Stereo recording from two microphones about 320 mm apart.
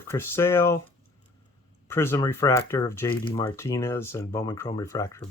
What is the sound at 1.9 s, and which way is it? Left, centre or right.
Speech, centre.